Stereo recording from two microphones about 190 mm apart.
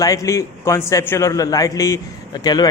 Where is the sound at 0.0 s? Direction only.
15° left (ahead or behind).